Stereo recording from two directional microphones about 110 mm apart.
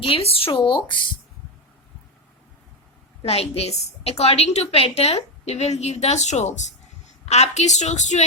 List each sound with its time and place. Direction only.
0.0 s speech: 60° left (ahead or behind)
3.2 s a woman's voice: 65° left (ahead or behind); by 8.2 s 90° left